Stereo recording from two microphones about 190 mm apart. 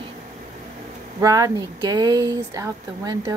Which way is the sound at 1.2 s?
20° right (ahead or behind).